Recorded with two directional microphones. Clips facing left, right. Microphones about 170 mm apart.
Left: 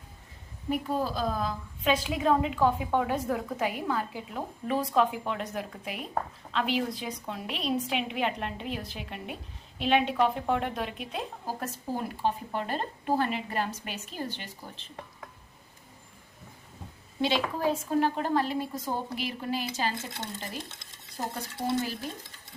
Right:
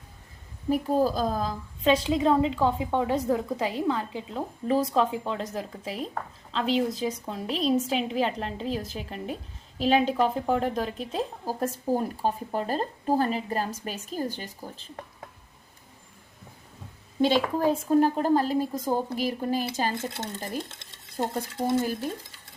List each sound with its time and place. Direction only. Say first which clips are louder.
0.7 s a woman's voice: right 6 dB; 40° right (ahead or behind)
17.2 s a woman's voice: right 5 dB; 45° right (ahead or behind)